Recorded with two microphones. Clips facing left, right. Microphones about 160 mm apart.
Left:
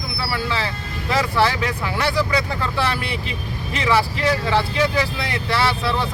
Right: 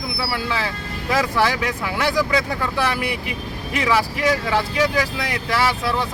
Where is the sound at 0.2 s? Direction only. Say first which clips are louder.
Left 1 dB; 10° right (ahead or behind).